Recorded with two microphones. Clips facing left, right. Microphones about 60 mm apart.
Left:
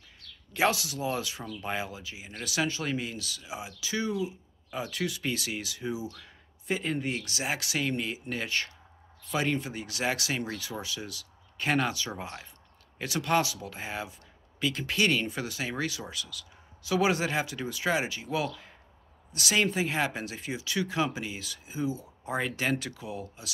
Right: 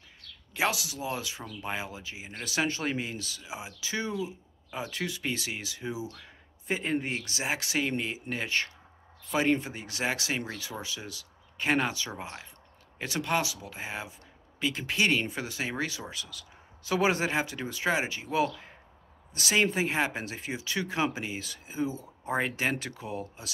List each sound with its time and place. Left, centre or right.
0.5 s speech: centre
1.9 s speech: right
8.0 s speech: centre; by 23.5 s right